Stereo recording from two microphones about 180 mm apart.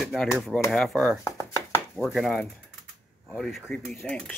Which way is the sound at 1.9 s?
Centre (ahead or behind).